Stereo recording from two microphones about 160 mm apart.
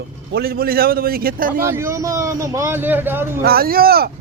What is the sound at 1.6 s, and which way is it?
A man's voice, 15° right (ahead or behind).